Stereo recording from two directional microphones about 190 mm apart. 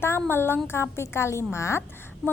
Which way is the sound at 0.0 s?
10° left (ahead or behind).